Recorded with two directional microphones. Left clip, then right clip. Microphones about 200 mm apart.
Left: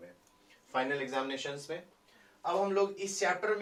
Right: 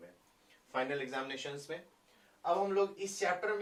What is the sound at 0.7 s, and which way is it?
Speech, 15° right (ahead or behind).